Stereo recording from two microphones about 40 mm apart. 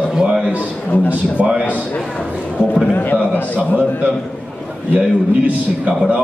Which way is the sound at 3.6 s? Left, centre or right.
Right.